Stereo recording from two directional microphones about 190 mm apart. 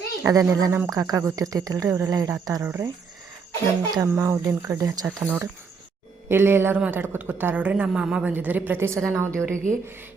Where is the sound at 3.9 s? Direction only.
15° right (ahead or behind).